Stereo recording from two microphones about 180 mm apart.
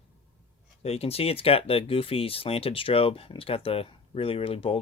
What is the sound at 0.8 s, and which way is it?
Speech, 35° left (ahead or behind).